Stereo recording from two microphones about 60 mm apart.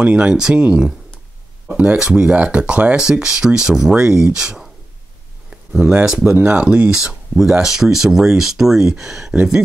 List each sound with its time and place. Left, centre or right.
0.0 s speech: centre
5.5 s a sound: centre
6.2 s speech: right
6.6 s speech: right
7.6 s speech: centre
9.3 s speech: right